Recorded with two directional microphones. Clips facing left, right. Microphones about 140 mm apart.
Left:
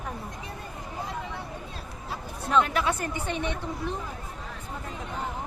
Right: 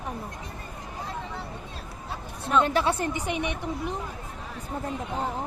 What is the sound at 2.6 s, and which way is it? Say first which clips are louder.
Speech: right 2 dB; 30° right (ahead or behind).